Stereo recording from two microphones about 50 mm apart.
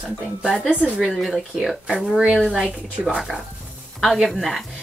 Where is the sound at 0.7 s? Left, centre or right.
Right.